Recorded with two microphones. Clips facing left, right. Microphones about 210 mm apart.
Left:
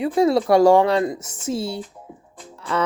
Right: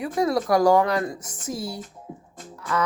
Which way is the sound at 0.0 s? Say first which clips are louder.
Left 5 dB; 25° left (ahead or behind).